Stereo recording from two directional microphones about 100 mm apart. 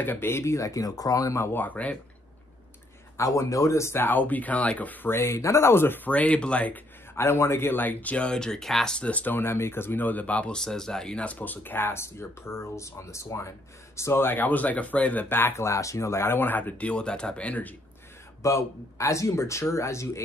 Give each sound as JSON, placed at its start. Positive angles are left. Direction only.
{"t": 0.0, "sound": "speech", "side_deg": 20}
{"t": 3.2, "sound": "speech", "side_deg": 35}
{"t": 7.2, "sound": "speech", "side_deg": 25}
{"t": 18.4, "sound": "speech", "side_deg": 30}